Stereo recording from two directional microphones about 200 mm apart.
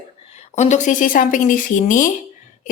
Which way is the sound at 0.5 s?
35° left (ahead or behind).